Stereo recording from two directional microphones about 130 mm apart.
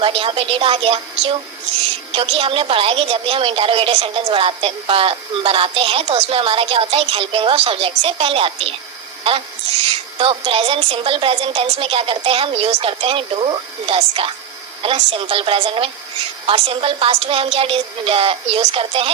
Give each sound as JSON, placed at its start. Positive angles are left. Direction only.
{"t": 0.0, "sound": "a woman's voice", "side_deg": -45}
{"t": 9.8, "sound": "a woman's voice", "side_deg": -45}